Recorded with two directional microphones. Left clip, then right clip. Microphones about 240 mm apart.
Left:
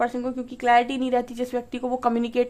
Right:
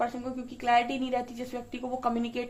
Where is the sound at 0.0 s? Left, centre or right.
Left.